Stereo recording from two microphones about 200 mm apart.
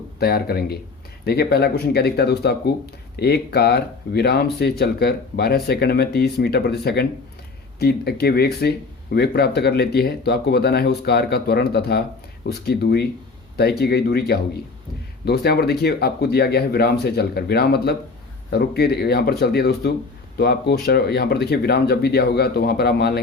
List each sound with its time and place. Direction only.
0.2 s speech: 50° left (ahead or behind)